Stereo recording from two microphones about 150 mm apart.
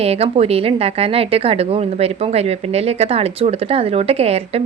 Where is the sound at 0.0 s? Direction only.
45° right (ahead or behind).